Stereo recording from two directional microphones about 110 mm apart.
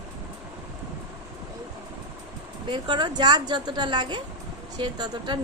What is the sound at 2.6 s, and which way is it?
A woman's voice, 45° right (ahead or behind).